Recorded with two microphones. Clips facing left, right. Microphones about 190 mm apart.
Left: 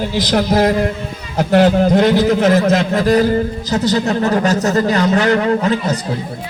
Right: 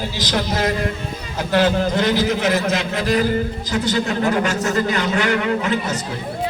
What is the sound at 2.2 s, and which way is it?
A man's voice, 40° left (ahead or behind).